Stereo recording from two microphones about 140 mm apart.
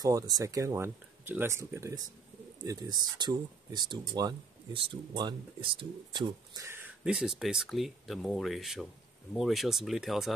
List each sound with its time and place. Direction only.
0.0 s speech: 25° right (ahead or behind)
6.5 s speech: 20° right (ahead or behind)
7.1 s speech: 5° right (ahead or behind)